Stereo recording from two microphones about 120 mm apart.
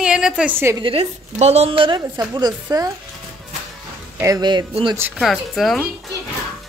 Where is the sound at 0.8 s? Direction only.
60° right (ahead or behind); by 2.9 s 30° right (ahead or behind).